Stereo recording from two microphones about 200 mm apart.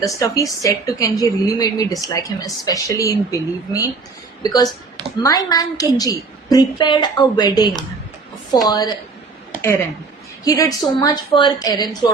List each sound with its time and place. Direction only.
0.0 s a woman's voice: 15° left (ahead or behind)